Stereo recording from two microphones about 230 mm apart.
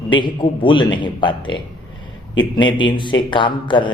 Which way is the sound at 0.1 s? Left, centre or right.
Left.